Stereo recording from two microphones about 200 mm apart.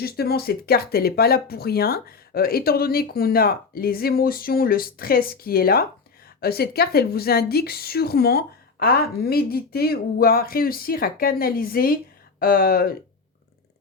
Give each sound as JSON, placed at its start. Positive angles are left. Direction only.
{"t": 0.0, "sound": "speech", "side_deg": 50}